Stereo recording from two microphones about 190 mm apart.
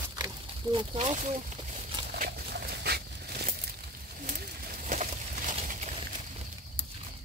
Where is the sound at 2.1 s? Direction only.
55° right (ahead or behind).